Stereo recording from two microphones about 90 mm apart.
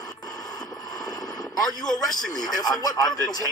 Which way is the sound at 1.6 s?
5° left (ahead or behind).